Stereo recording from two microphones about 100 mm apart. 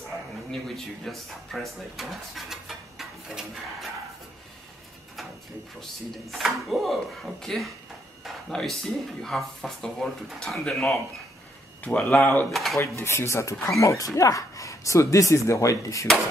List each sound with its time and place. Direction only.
0.5 s speech: 5° left (ahead or behind)
6.3 s speech: centre (ahead or behind); by 12.4 s 15° left (ahead or behind)
12.4 s speech: centre (ahead or behind)
12.7 s speech: 30° left (ahead or behind)